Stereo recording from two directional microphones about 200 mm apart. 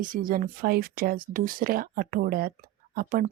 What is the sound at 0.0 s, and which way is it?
Speech, 45° right (ahead or behind).